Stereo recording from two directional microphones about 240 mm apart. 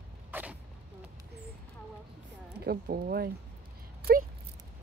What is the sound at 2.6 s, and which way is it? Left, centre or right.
Speech, right.